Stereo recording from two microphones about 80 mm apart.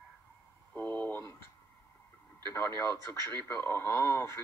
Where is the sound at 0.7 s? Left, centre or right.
Left.